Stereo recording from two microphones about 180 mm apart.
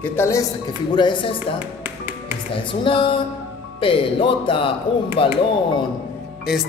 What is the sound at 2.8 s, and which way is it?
A man's voice, 30° left (ahead or behind).